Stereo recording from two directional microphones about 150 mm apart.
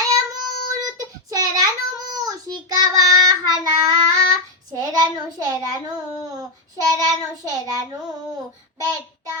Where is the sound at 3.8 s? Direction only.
25° right (ahead or behind).